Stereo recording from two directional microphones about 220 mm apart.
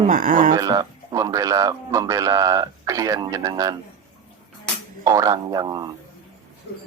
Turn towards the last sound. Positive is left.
turn(degrees=-15)  # may be behind; listen again after turning